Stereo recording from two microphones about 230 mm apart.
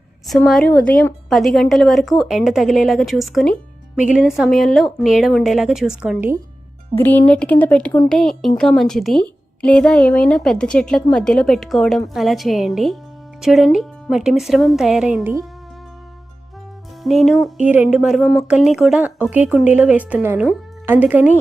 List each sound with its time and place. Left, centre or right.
0.3 s speech: centre
6.9 s speech: centre
17.0 s speech: centre